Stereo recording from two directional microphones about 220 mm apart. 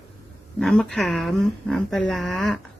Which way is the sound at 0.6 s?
Centre (ahead or behind).